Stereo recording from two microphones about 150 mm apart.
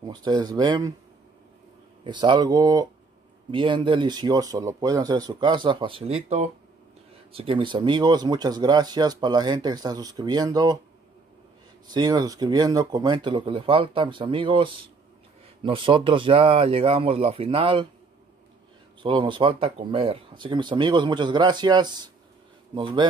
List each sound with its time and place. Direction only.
0.0 s speech: 25° right (ahead or behind)
2.0 s speech: 30° right (ahead or behind)
11.9 s speech: 25° right (ahead or behind)
19.0 s speech: 30° right (ahead or behind)